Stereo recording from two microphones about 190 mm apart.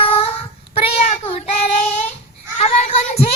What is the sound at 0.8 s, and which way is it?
Child singing, 35° left (ahead or behind).